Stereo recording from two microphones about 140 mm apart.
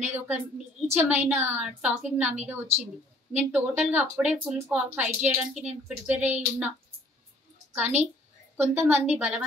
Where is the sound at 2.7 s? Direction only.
50° right (ahead or behind).